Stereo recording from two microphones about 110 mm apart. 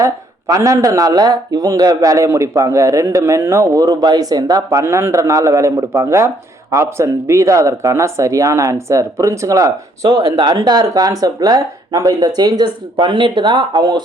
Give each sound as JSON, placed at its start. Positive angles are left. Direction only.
{"t": 0.0, "sound": "speech", "side_deg": -30}